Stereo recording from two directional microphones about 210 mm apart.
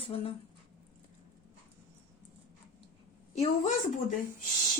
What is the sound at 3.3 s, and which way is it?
Speech, 35° left (ahead or behind).